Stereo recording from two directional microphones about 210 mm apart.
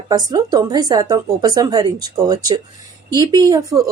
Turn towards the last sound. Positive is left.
turn(degrees=-15)  # may be behind; listen again after turning